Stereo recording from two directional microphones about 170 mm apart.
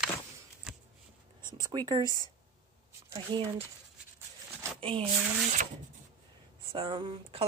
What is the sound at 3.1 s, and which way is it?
Speech, 20° right (ahead or behind).